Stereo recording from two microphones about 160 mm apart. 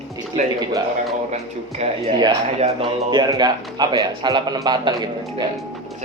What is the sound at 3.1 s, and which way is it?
A man's voice, 25° right (ahead or behind).